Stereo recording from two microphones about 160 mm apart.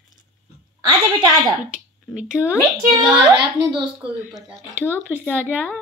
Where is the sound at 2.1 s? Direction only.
5° right (ahead or behind).